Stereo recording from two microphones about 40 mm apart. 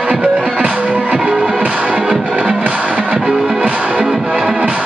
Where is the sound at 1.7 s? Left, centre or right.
Right.